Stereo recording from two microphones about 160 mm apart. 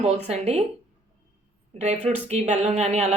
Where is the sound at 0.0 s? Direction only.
45° right (ahead or behind).